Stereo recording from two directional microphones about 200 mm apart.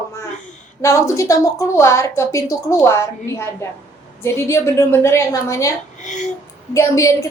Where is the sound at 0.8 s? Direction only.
15° left (ahead or behind).